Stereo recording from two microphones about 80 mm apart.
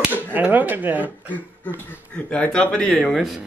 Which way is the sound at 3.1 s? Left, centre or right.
Centre.